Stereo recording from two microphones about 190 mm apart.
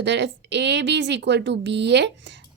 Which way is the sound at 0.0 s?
70° right (ahead or behind).